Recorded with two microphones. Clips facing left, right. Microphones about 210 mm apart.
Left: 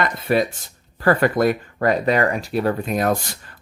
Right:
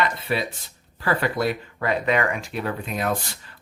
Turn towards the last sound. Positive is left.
turn(degrees=45)  # may be behind; listen again after turning